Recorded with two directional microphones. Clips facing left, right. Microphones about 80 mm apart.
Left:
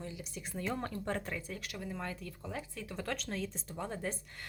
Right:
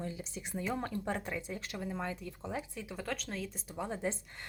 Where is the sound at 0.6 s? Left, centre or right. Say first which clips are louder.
Right 1 dB; centre.